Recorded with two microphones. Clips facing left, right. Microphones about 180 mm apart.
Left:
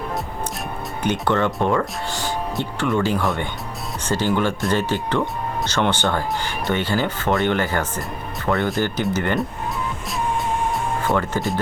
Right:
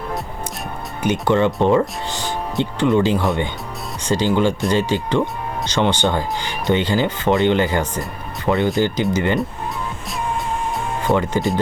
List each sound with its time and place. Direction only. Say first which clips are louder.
1.0 s speech: right 4 dB; 15° right (ahead or behind)
11.1 s speech: right 5 dB; 20° right (ahead or behind)